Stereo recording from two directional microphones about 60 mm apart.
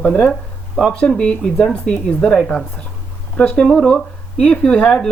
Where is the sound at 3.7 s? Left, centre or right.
Centre.